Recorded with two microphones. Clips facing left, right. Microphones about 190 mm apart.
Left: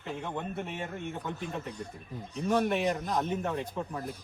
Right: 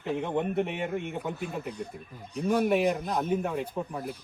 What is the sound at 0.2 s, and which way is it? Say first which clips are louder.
Speech: right 9 dB; 15° right (ahead or behind).